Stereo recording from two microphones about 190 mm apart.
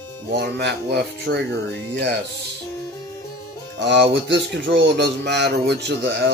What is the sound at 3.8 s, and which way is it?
Speech, 65° right (ahead or behind).